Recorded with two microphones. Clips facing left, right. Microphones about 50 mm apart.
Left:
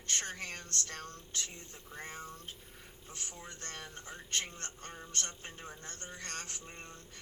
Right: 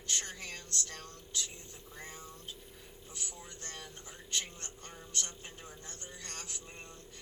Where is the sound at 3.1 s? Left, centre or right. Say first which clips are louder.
Left 1 dB; left.